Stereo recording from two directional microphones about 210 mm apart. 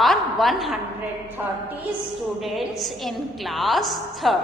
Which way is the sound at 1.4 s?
10° right (ahead or behind).